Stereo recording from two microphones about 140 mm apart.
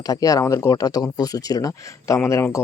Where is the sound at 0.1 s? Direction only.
25° left (ahead or behind).